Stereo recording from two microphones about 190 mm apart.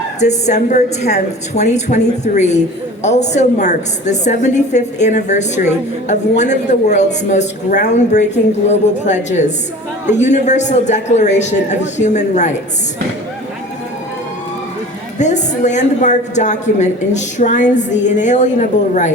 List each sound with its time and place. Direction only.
0.2 s a woman's voice: 35° left (ahead or behind)
15.2 s a woman's voice: 40° left (ahead or behind)